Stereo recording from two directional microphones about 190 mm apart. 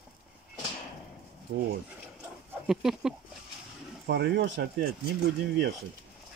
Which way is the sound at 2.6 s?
Centre (ahead or behind).